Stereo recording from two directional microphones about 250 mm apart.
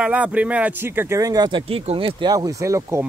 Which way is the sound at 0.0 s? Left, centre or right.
Centre.